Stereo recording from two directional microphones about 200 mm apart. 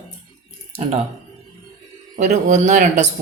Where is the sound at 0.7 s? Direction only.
30° right (ahead or behind).